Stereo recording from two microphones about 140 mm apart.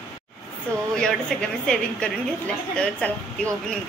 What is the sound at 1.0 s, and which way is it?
A woman's voice, 5° left (ahead or behind).